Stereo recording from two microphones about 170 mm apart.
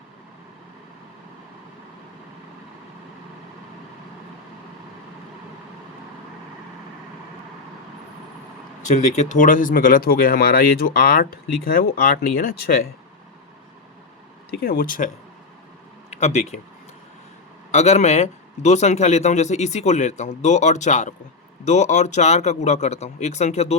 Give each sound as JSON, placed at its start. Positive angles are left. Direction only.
{"t": 8.9, "sound": "speech", "side_deg": 45}
{"t": 14.6, "sound": "speech", "side_deg": 60}
{"t": 16.0, "sound": "speech", "side_deg": 40}
{"t": 17.7, "sound": "a man's voice", "side_deg": 40}